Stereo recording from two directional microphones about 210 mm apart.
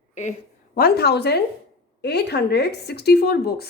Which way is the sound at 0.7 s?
50° left (ahead or behind).